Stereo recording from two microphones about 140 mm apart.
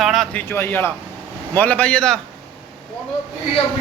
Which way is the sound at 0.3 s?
15° left (ahead or behind).